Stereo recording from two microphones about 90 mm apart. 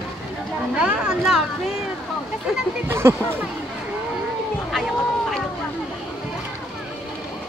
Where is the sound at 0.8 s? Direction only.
10° right (ahead or behind).